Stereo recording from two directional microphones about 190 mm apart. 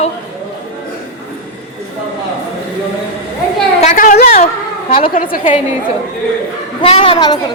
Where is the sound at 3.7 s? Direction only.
40° left (ahead or behind).